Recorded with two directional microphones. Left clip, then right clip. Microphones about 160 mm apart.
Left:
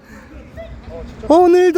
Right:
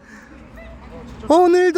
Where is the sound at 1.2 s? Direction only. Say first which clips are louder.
Left 3 dB; 15° left (ahead or behind).